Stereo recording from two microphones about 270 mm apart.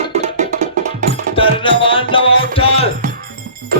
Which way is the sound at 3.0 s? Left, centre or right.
Right.